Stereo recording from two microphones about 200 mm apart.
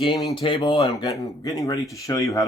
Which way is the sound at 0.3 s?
25° left (ahead or behind).